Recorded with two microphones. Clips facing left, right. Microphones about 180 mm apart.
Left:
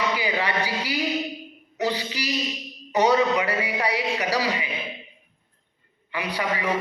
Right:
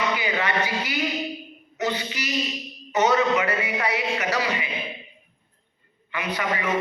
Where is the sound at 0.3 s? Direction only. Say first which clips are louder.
Right 1 dB; 35° left (ahead or behind).